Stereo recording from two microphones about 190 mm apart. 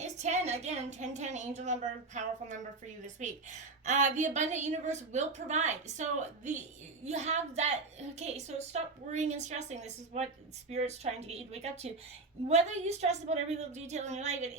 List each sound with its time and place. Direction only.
0.0 s a woman's voice: 35° right (ahead or behind)